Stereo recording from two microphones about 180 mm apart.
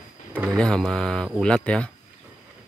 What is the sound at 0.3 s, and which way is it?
Speech, 15° right (ahead or behind).